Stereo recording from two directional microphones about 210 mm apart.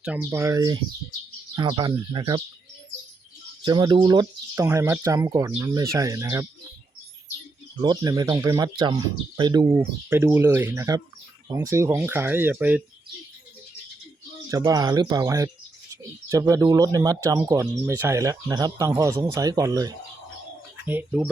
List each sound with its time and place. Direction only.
0.0 s speech: 10° right (ahead or behind)
3.6 s speech: 20° right (ahead or behind)
7.8 s speech: 15° right (ahead or behind)
14.5 s speech: 15° right (ahead or behind)